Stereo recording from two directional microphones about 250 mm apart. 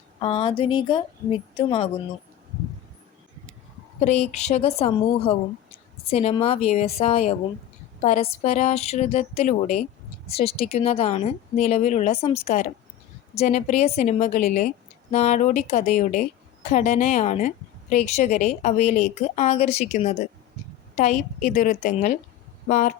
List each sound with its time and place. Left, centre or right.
0.2 s a woman's voice: left
4.0 s a woman's voice: left